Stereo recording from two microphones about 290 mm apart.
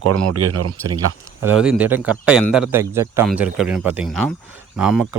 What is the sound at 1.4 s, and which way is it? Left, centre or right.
Speech, centre.